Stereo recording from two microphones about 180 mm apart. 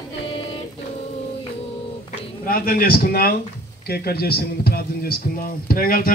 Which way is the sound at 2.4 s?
55° left (ahead or behind).